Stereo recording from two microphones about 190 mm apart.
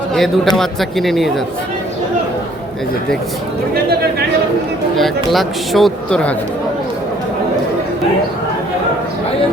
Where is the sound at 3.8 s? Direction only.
55° right (ahead or behind).